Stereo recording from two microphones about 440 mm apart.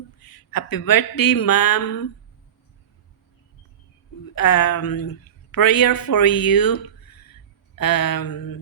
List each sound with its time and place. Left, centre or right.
0.2 s speech: left
4.4 s a woman's voice: left